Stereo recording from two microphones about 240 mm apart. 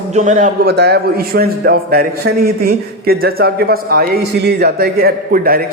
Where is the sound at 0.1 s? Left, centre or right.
Right.